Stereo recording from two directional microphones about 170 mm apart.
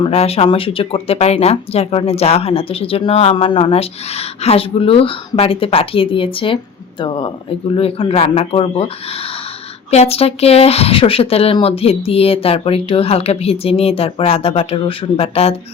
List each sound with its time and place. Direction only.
0.0 s speech: 35° left (ahead or behind)
9.9 s speech: 40° left (ahead or behind)